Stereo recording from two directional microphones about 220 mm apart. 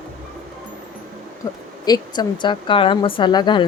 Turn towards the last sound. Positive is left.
turn(degrees=20)  # may be behind; listen again after turning